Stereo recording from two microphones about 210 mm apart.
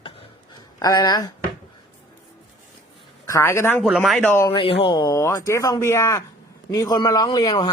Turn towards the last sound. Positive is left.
turn(degrees=20)  # may be behind; listen again after turning